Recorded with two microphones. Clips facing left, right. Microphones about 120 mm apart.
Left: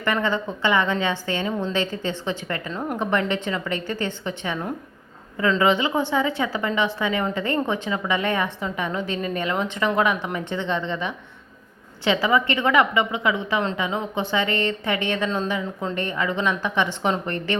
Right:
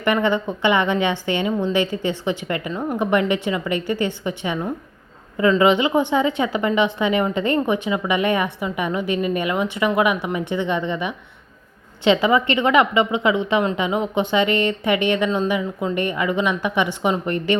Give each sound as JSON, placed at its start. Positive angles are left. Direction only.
{"t": 0.0, "sound": "a woman's voice", "side_deg": -15}